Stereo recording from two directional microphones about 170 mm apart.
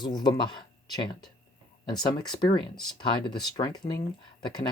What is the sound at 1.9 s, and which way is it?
Speech, 25° left (ahead or behind).